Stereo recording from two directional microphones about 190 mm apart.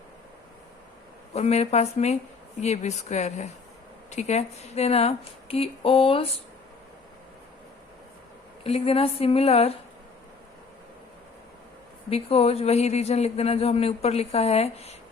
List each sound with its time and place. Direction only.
1.3 s a man's voice: 35° left (ahead or behind)
8.6 s a man's voice: 30° left (ahead or behind)
12.1 s a man's voice: 30° left (ahead or behind)